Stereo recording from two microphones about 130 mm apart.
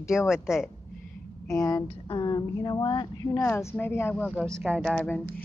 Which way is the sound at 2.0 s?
40° left (ahead or behind).